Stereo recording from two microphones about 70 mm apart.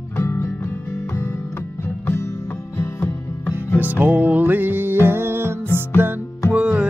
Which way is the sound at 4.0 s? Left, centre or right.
Right.